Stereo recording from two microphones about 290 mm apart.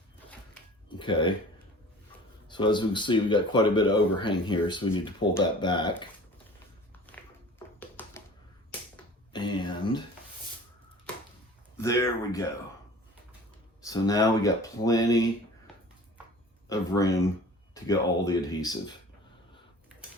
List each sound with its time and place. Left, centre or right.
0.9 s a sound: centre
2.5 s speech: centre
7.8 s a sound: centre
9.3 s speech: centre
11.8 s speech: centre
13.8 s speech: centre
16.6 s speech: centre